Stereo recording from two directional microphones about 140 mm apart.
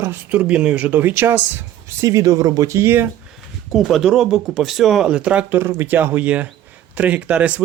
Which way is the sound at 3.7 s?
Centre (ahead or behind).